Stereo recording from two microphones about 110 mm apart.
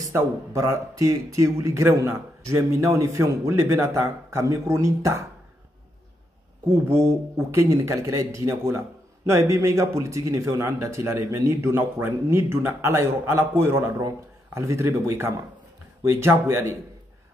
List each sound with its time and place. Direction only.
0.1 s a man's voice: 25° right (ahead or behind)
6.9 s a man's voice: 25° right (ahead or behind)